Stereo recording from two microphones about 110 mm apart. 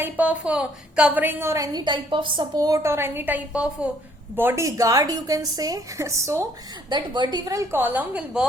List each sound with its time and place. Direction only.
0.0 s a woman's voice: 15° right (ahead or behind); by 1.8 s 30° right (ahead or behind)
1.8 s a woman's voice: 45° right (ahead or behind); by 6.4 s 25° right (ahead or behind)
6.9 s a woman's voice: 45° right (ahead or behind)
7.7 s a woman's voice: 15° right (ahead or behind)